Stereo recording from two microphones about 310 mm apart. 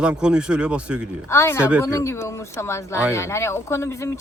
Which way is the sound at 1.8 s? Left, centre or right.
Centre.